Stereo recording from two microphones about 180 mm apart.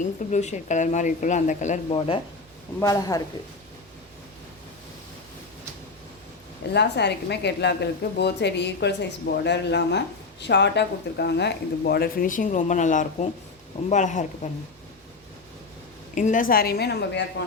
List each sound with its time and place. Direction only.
0.0 s a woman's voice: 40° left (ahead or behind)
2.8 s speech: 20° left (ahead or behind)
6.7 s a woman's voice: 70° left (ahead or behind); by 14.3 s 40° left (ahead or behind)
16.1 s speech: 45° left (ahead or behind); by 17.2 s 65° left (ahead or behind)